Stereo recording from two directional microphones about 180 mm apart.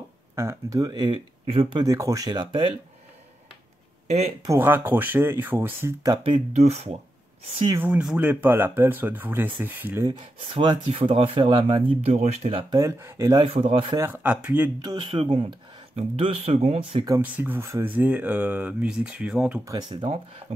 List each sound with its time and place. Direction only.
0.4 s speech: 15° right (ahead or behind)
4.5 s speech: 10° right (ahead or behind)
6.2 s speech: 35° right (ahead or behind)
7.7 s speech: 10° right (ahead or behind)
10.5 s speech: 25° right (ahead or behind)
12.6 s speech: 20° right (ahead or behind)
14.0 s speech: 10° right (ahead or behind)
14.8 s speech: 25° right (ahead or behind)
17.2 s speech: 10° right (ahead or behind)
19.6 s speech: 20° right (ahead or behind)